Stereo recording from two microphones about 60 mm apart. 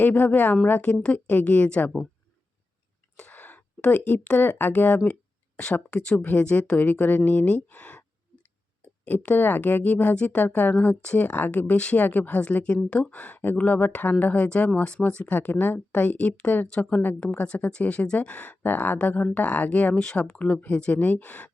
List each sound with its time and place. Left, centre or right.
0.0 s speech: left
3.3 s a sound: left
4.2 s speech: left
5.9 s speech: centre
6.1 s speech: left
9.0 s speech: left
15.3 s speech: left
16.6 s speech: centre